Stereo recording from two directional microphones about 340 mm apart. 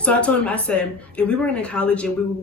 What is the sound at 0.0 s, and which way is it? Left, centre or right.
Speech, centre.